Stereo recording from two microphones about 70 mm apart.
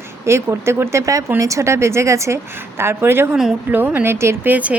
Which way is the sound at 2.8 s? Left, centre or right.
Right.